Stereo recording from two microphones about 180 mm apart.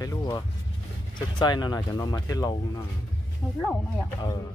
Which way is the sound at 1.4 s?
25° left (ahead or behind).